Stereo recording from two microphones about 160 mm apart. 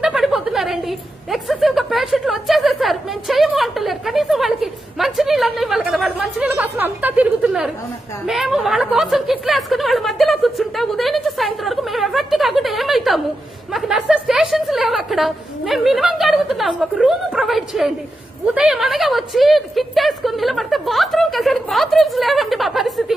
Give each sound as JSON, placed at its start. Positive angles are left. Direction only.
{"t": 0.0, "sound": "a woman's voice", "side_deg": -5}